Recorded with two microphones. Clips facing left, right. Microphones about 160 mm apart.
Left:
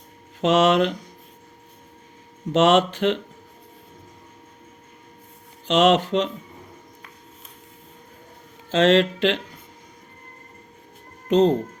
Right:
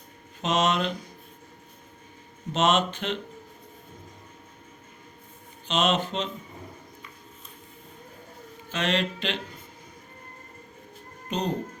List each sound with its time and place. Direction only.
0.4 s speech: 85° left
2.5 s speech: 85° left
5.6 s speech: 90° left
8.7 s speech: 90° left
11.3 s speech: 90° left